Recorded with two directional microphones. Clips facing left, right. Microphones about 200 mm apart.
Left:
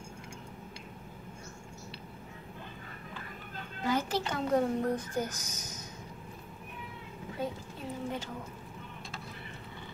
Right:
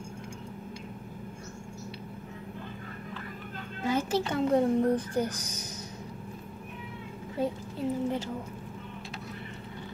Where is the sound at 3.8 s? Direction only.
25° right (ahead or behind).